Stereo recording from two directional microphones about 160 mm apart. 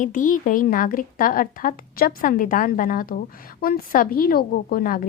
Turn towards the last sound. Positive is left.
turn(degrees=60)  # may be behind; listen again after turning